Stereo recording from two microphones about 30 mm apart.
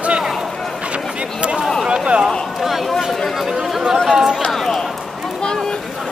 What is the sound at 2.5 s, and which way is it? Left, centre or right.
Speech, centre.